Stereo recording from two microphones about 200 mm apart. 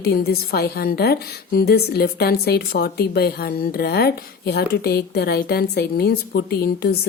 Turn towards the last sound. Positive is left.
turn(degrees=55)  # may be behind; listen again after turning